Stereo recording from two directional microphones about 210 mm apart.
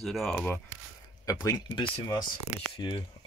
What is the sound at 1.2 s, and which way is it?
Speech, 15° left (ahead or behind).